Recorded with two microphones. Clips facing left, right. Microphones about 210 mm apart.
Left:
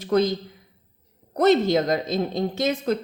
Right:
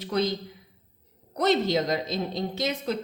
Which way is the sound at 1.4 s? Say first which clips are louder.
Left 5 dB; 50° left (ahead or behind).